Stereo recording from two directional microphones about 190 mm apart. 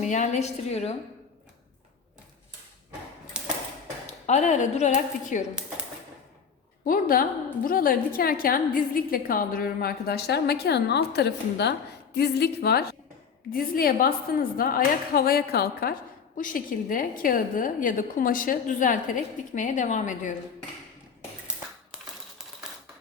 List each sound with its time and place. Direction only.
0.0 s a woman's voice: 40° left (ahead or behind)
3.3 s typewriter: 5° right (ahead or behind)
4.0 s speech: 35° left (ahead or behind)
6.8 s a woman's voice: 50° left (ahead or behind)